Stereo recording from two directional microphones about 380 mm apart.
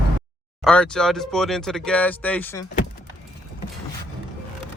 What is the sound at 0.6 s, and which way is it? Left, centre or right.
Speech, centre.